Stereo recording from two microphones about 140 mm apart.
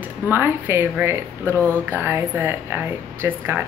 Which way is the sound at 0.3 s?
15° right (ahead or behind).